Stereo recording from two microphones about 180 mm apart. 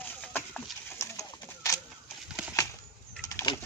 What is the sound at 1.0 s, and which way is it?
Clip-clop, 20° left (ahead or behind).